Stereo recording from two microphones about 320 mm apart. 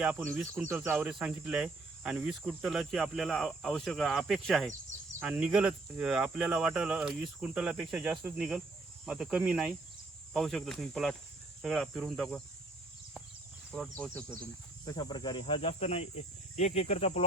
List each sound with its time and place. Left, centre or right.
0.0 s cricket: centre
13.7 s cricket: centre
14.8 s speech: centre